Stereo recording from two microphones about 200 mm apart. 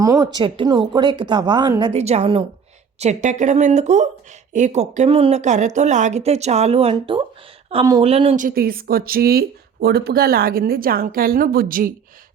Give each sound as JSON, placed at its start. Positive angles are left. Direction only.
{"t": 0.0, "sound": "speech", "side_deg": -15}
{"t": 8.4, "sound": "speech", "side_deg": -45}